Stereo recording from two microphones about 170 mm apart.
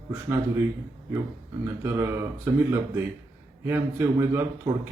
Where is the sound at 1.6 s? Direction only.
15° right (ahead or behind).